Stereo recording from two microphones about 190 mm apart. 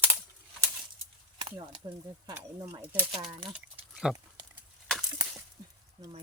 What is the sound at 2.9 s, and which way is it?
Speech, 10° right (ahead or behind).